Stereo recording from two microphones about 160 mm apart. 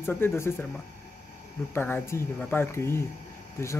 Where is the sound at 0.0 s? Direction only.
15° left (ahead or behind).